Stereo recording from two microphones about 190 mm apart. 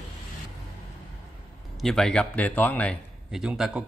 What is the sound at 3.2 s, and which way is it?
Speech, 5° right (ahead or behind).